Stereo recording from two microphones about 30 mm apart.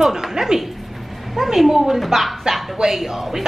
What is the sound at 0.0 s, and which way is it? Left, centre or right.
Speech, centre.